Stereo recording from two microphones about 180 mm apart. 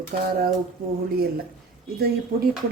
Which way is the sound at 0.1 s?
55° right (ahead or behind).